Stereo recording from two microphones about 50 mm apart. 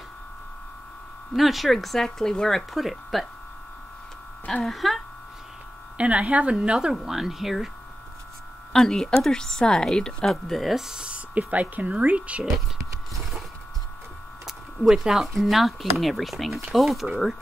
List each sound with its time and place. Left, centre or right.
1.3 s speech: centre
4.6 s speech: centre
5.9 s speech: right
7.0 s speech: centre
8.7 s speech: centre
11.0 s speech: right
14.4 s a sound: centre
15.4 s speech: centre